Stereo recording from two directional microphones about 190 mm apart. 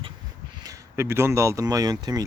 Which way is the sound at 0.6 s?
15° right (ahead or behind).